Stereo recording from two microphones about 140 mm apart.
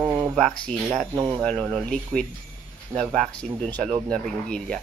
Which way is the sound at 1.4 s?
5° left (ahead or behind).